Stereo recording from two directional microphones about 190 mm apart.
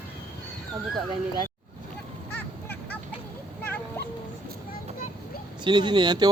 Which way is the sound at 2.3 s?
10° left (ahead or behind).